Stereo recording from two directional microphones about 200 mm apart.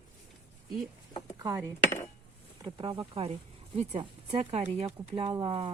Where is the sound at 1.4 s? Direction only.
15° right (ahead or behind).